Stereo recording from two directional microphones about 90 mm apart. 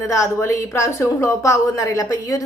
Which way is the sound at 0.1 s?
30° left (ahead or behind).